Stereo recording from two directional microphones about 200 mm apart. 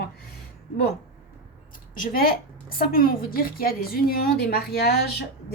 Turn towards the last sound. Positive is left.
turn(degrees=55)  # may be behind; listen again after turning